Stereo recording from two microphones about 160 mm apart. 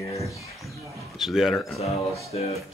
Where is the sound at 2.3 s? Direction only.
40° left (ahead or behind).